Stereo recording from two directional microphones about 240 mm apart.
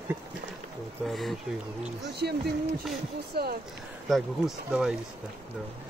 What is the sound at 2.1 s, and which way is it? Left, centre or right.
Speech, right.